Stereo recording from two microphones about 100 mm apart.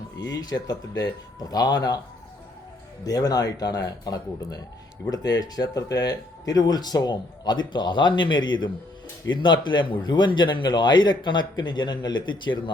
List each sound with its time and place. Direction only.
0.2 s speech: 35° left (ahead or behind)
3.0 s speech: 40° left (ahead or behind)